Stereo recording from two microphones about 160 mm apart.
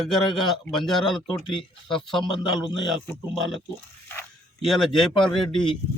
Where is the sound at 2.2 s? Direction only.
30° left (ahead or behind).